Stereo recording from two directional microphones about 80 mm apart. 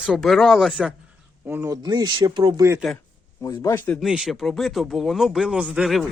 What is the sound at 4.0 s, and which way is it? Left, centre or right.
Speech, centre.